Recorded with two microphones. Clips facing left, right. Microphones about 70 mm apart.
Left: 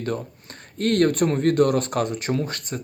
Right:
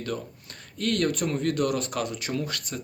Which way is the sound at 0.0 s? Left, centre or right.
Left.